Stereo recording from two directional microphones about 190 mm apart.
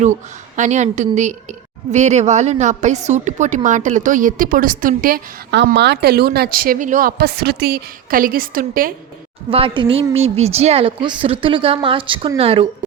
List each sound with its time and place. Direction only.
0.5 s a woman's voice: 40° right (ahead or behind)
9.5 s a woman's voice: 30° right (ahead or behind)